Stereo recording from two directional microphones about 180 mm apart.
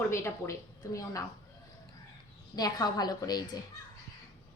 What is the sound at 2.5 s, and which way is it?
A woman's voice, 20° left (ahead or behind).